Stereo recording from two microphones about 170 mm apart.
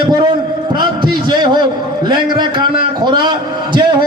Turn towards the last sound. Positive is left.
turn(degrees=-25)  # may be behind; listen again after turning